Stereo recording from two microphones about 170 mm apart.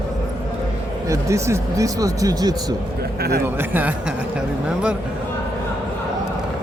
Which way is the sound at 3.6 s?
10° right (ahead or behind).